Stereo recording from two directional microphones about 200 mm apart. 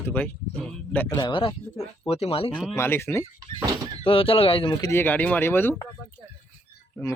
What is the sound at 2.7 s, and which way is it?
Speech, 10° left (ahead or behind).